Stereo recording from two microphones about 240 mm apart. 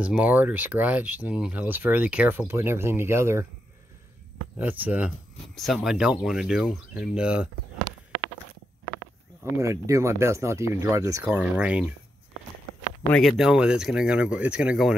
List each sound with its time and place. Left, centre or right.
0.0 s speech: centre
4.6 s speech: centre
9.4 s speech: centre
13.1 s speech: centre